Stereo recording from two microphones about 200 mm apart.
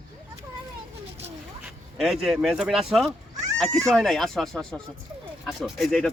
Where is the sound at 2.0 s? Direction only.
Centre (ahead or behind).